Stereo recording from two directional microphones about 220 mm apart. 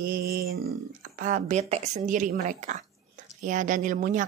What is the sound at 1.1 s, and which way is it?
Speech, 35° right (ahead or behind).